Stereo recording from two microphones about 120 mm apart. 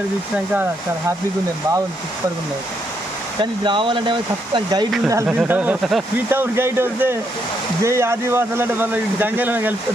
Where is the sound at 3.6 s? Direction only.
40° right (ahead or behind).